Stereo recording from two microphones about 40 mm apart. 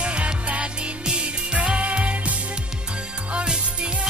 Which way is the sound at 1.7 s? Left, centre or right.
Right.